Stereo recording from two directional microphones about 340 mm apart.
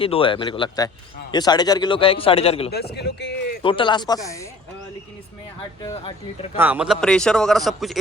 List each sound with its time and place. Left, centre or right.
0.0 s a man's voice: centre
2.7 s speech: left
3.6 s a man's voice: centre
5.8 s a man's voice: centre
6.6 s a man's voice: centre